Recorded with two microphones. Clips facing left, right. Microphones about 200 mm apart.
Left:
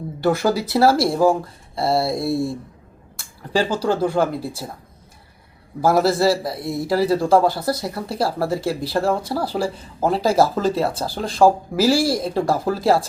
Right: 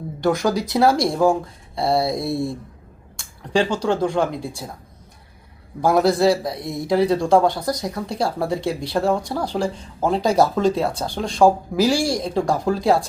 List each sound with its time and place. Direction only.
0.2 s speech: 5° left (ahead or behind)
5.8 s speech: 5° left (ahead or behind)